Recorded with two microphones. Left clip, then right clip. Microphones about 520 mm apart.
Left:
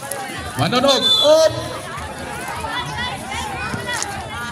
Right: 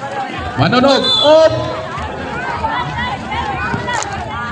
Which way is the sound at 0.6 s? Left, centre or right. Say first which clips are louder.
Right 4 dB; left.